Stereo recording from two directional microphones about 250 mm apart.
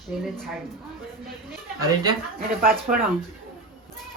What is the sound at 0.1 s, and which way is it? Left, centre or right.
Speech, centre.